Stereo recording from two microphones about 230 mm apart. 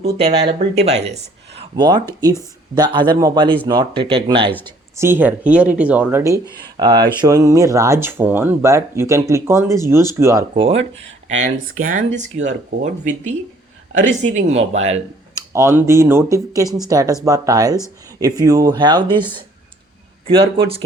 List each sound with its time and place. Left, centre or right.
0.0 s speech: right
1.7 s speech: centre
4.6 s speech: centre
10.5 s speech: right
15.5 s speech: centre